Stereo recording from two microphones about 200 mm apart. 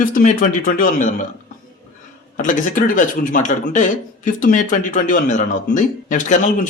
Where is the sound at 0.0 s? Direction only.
45° left (ahead or behind).